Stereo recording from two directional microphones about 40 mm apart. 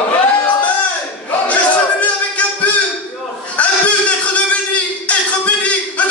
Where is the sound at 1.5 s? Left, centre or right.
Left.